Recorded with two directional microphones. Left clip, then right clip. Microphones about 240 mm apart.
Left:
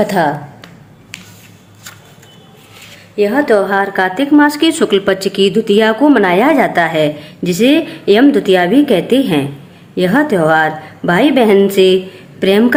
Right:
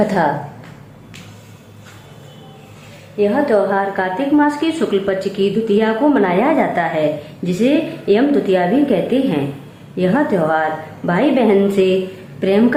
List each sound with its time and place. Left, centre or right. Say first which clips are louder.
3.2 s a woman's voice: left 3 dB; left